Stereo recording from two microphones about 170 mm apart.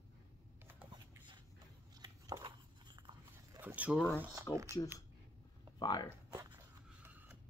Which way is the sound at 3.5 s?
10° right (ahead or behind).